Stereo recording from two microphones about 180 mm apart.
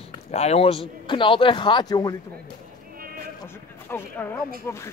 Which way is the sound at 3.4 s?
10° left (ahead or behind).